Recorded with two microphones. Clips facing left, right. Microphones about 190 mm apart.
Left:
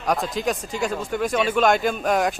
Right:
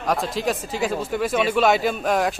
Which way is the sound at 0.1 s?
Centre (ahead or behind).